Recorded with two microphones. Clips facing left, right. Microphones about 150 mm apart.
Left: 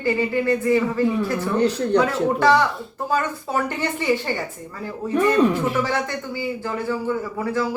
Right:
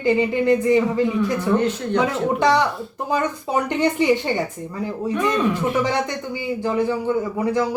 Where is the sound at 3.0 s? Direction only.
15° right (ahead or behind).